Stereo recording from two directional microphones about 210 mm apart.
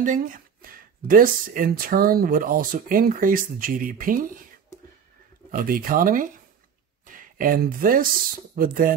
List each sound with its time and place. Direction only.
0.0 s speech: 40° right (ahead or behind)
5.5 s speech: 40° right (ahead or behind)